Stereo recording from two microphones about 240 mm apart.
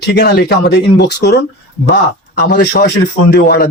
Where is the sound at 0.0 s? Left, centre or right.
Left.